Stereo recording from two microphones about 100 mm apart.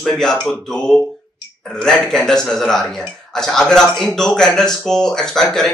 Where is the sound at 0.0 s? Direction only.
5° left (ahead or behind).